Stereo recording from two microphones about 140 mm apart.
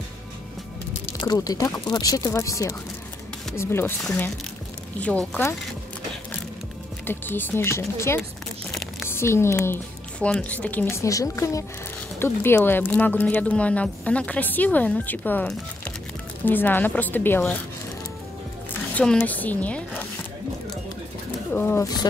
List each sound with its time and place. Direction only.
1.2 s speech: 30° left (ahead or behind)
4.9 s speech: 10° left (ahead or behind)
7.1 s speech: 15° left (ahead or behind)
18.7 s speech: 10° left (ahead or behind)
21.5 s speech: 25° left (ahead or behind)